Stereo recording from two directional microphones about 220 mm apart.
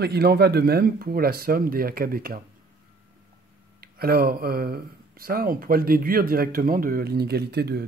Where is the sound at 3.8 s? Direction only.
45° right (ahead or behind).